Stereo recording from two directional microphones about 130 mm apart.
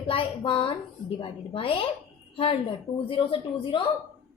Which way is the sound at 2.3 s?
45° left (ahead or behind).